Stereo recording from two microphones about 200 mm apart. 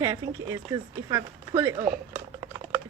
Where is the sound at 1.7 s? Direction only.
40° right (ahead or behind).